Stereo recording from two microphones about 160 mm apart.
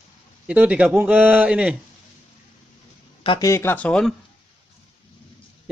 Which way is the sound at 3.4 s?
15° left (ahead or behind).